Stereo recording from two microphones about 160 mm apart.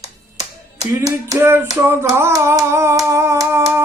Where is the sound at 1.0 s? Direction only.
15° right (ahead or behind).